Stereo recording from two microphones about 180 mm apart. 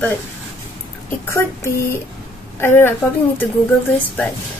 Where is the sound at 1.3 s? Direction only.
15° left (ahead or behind).